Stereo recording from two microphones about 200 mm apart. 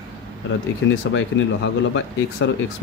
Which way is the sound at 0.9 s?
70° left (ahead or behind).